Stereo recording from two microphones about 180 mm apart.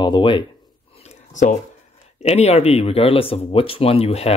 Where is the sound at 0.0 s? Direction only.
25° left (ahead or behind).